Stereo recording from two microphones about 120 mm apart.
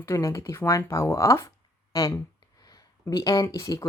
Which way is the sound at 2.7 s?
30° left (ahead or behind).